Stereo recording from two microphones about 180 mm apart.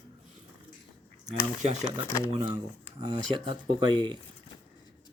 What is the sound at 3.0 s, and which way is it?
Speech, 25° right (ahead or behind).